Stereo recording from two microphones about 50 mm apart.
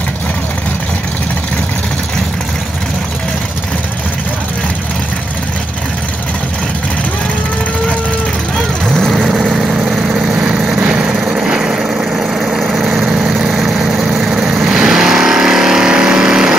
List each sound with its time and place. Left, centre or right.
8.9 s vehicle: centre
9.2 s vehicle: centre